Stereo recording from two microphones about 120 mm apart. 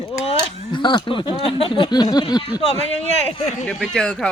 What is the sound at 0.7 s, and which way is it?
Speech, 40° left (ahead or behind).